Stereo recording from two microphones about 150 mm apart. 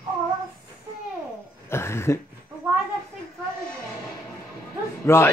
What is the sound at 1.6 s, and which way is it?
Speech, 15° left (ahead or behind).